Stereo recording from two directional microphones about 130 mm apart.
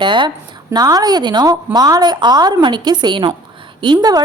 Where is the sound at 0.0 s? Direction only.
40° right (ahead or behind).